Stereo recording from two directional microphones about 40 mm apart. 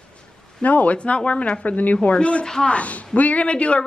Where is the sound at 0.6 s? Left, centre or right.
Left.